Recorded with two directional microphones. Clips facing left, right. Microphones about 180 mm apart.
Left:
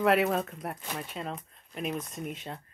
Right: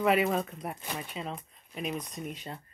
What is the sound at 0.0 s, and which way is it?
Speech, centre (ahead or behind).